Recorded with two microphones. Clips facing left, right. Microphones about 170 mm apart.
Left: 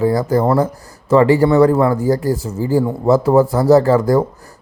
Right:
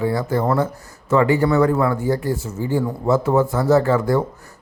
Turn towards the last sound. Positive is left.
turn(degrees=40)  # may be behind; listen again after turning